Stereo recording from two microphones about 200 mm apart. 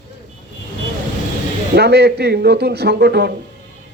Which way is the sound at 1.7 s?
55° right (ahead or behind).